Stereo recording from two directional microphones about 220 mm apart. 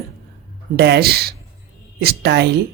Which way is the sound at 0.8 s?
45° right (ahead or behind).